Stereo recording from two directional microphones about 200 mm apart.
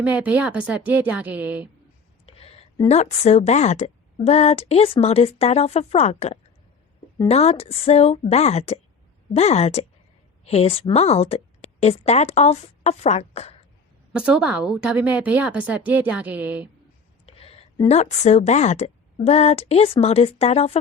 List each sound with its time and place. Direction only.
0.0 s a woman's voice: 5° right (ahead or behind)
2.2 s a woman's voice: 30° left (ahead or behind)
14.1 s a woman's voice: 5° right (ahead or behind)
17.2 s a woman's voice: 30° left (ahead or behind)